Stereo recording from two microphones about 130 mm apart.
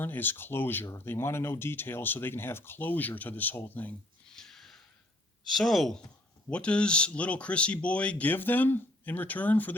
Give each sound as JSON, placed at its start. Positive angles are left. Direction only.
{"t": 0.0, "sound": "speech", "side_deg": 15}
{"t": 4.4, "sound": "a sound", "side_deg": 5}
{"t": 5.5, "sound": "speech", "side_deg": 0}